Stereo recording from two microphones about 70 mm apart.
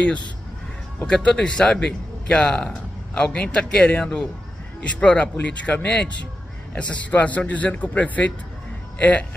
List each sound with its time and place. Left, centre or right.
1.0 s a man's voice: centre